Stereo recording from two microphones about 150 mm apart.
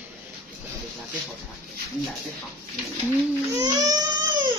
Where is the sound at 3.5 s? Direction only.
25° right (ahead or behind).